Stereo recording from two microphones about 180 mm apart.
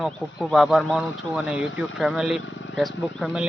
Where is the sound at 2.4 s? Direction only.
90° left.